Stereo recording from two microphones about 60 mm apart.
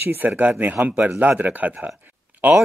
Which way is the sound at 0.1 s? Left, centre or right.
Right.